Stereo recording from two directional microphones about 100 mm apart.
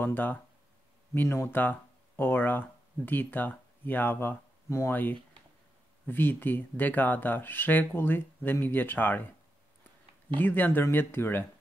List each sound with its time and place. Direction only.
0.0 s speech: 20° left (ahead or behind)
6.0 s speech: 20° left (ahead or behind)
10.4 s speech: 20° left (ahead or behind)